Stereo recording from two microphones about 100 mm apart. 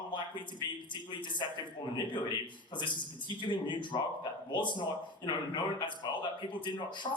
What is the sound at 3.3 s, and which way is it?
Speech, 50° left (ahead or behind).